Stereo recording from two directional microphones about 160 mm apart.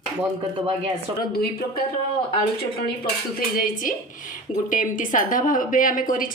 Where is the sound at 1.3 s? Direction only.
75° left (ahead or behind).